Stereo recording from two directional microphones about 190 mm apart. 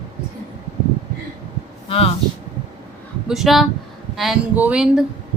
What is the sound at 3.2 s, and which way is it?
Speech, centre (ahead or behind).